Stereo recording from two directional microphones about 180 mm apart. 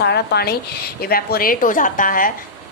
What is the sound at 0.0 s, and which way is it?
A woman's voice, 65° left (ahead or behind).